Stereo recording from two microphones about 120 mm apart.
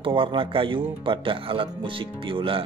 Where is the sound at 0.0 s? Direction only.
45° right (ahead or behind).